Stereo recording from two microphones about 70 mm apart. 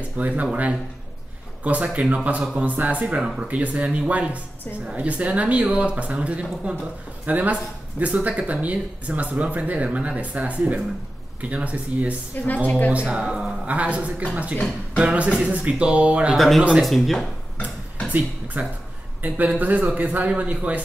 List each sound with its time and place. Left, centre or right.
0.2 s speech: right
12.6 s a woman's voice: left
13.0 s speech: centre
16.3 s speech: centre
18.1 s speech: right